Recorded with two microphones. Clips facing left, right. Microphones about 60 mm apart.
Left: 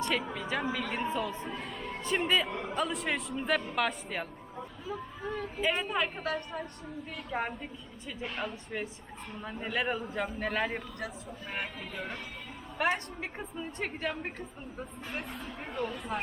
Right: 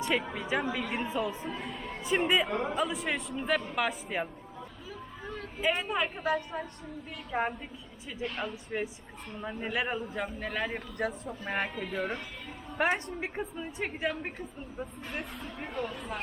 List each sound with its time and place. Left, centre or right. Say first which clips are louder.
0.0 s a woman's voice: right 1 dB; centre
2.2 s speech: right 1 dB; centre
2.7 s speech: right 1 dB; centre
4.9 s speech: left 6 dB; centre
8.7 s speech: right 3 dB; centre
11.0 s speech: right 6 dB; right
12.7 s a woman's voice: right 2 dB; right; by 16.2 s centre